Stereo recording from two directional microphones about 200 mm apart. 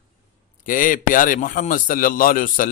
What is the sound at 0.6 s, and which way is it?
A man's voice, 40° left (ahead or behind).